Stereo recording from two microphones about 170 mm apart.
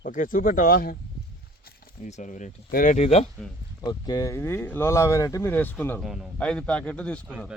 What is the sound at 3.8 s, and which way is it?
Speech, 25° left (ahead or behind).